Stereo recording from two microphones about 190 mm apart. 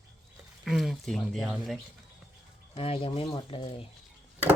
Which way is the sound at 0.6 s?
Centre (ahead or behind).